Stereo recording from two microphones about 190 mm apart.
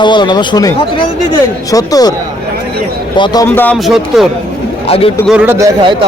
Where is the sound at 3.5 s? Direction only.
10° left (ahead or behind).